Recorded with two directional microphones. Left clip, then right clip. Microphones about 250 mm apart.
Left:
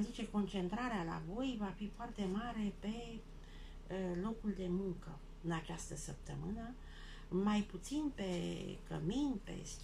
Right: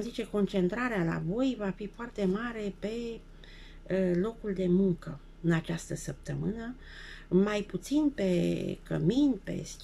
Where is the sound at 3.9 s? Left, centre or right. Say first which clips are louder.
Right 13 dB; right.